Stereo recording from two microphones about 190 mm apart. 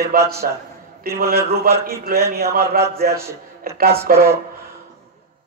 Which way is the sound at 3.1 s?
15° right (ahead or behind).